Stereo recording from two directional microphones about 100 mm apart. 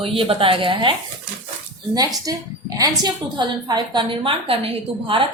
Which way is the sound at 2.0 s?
40° right (ahead or behind).